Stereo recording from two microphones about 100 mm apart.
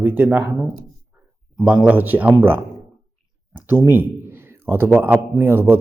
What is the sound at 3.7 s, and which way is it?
A man's voice, 20° right (ahead or behind).